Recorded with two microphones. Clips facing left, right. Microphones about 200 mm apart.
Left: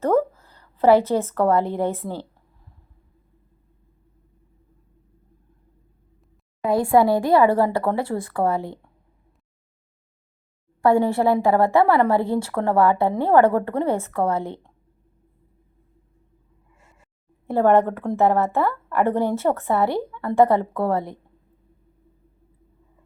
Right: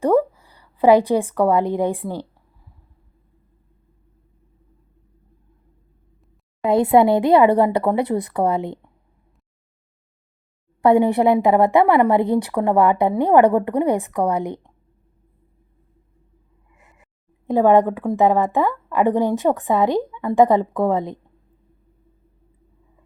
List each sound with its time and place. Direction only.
0.0 s a woman's voice: 15° right (ahead or behind)
6.7 s speech: 20° right (ahead or behind)
10.8 s a woman's voice: 20° right (ahead or behind)
17.0 s a woman's voice: 15° right (ahead or behind)